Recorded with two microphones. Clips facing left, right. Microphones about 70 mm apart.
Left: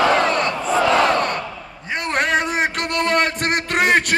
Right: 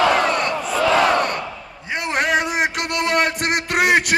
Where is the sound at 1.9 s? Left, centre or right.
Centre.